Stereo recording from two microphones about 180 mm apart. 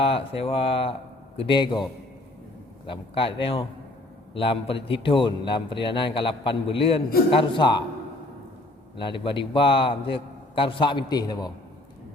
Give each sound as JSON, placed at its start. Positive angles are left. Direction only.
{"t": 0.0, "sound": "a man's voice", "side_deg": 30}
{"t": 2.8, "sound": "a man's voice", "side_deg": 30}
{"t": 9.0, "sound": "a man's voice", "side_deg": 25}